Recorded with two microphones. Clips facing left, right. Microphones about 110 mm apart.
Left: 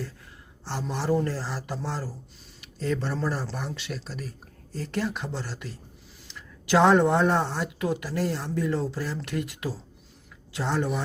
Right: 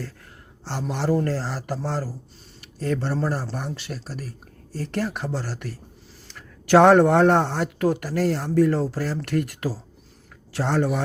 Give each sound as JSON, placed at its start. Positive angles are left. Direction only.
{"t": 0.7, "sound": "speech", "side_deg": -50}
{"t": 4.8, "sound": "speech", "side_deg": -55}